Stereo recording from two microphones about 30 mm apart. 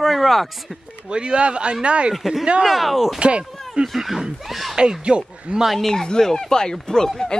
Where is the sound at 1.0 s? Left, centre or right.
Right.